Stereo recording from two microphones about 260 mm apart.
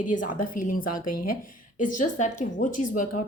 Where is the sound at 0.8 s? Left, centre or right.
Left.